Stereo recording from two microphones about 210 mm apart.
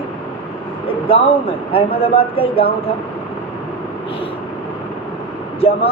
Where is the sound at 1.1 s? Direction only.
25° left (ahead or behind).